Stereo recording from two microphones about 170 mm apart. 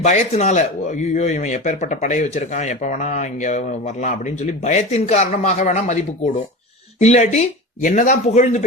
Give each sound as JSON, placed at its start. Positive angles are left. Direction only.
{"t": 0.0, "sound": "speech", "side_deg": 45}